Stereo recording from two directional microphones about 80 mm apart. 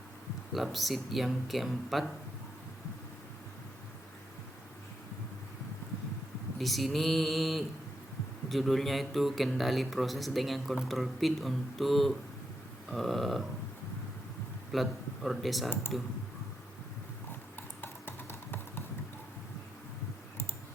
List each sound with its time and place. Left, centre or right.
0.5 s speech: centre
6.6 s speech: centre
14.7 s speech: centre
17.6 s a sound: left